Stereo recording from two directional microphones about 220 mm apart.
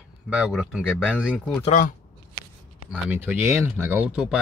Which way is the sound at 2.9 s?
10° right (ahead or behind).